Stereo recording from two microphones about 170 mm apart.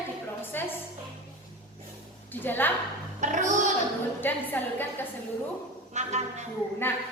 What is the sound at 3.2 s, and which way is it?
Speech, 45° right (ahead or behind).